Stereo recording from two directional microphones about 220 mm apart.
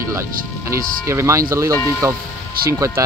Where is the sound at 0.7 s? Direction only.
15° right (ahead or behind).